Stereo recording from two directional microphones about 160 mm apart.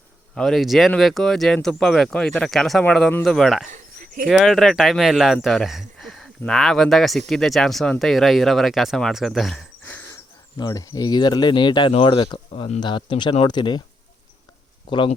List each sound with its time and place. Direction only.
0.3 s speech: centre (ahead or behind)
3.7 s a sound: 60° right (ahead or behind)
4.3 s speech: centre (ahead or behind)
10.6 s speech: 25° left (ahead or behind)
12.5 s speech: 45° left (ahead or behind)
12.8 s speech: 30° left (ahead or behind)
14.8 s speech: 30° left (ahead or behind)